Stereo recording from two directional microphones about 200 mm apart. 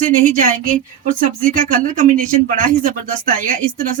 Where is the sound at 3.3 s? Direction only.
40° right (ahead or behind).